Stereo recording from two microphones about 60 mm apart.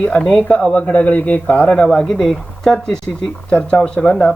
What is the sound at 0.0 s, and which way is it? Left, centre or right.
Speech, centre.